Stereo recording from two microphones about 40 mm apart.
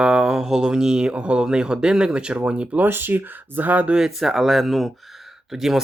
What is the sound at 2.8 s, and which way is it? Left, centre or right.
Speech, right.